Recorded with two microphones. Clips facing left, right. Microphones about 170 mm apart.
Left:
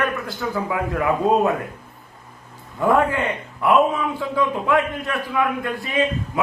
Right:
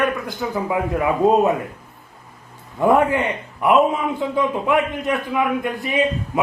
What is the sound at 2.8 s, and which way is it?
A man's voice, 20° right (ahead or behind).